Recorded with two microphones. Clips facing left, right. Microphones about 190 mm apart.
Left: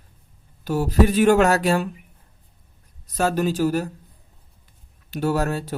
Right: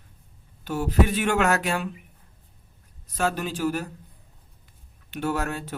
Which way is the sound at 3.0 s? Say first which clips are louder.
Left 5 dB; 40° left (ahead or behind).